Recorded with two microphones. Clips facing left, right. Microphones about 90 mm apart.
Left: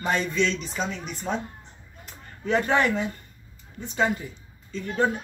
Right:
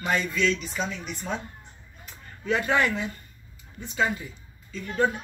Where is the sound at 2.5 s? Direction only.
35° left (ahead or behind).